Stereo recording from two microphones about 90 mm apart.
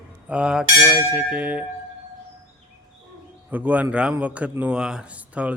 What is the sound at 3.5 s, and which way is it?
Speech, 20° right (ahead or behind).